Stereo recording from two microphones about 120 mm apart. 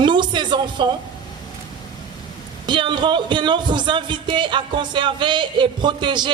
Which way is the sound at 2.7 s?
40° right (ahead or behind).